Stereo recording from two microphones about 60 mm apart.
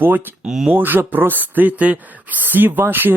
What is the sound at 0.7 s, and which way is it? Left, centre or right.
Speech, right.